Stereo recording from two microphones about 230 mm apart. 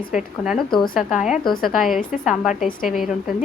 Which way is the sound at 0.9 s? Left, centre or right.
Centre.